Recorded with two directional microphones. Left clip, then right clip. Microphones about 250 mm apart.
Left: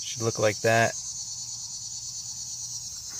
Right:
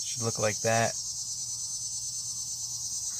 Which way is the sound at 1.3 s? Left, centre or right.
Right.